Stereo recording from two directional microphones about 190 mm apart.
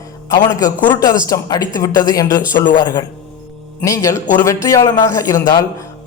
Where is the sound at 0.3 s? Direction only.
20° left (ahead or behind).